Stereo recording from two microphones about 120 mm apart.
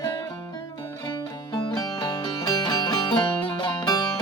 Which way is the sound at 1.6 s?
35° left (ahead or behind).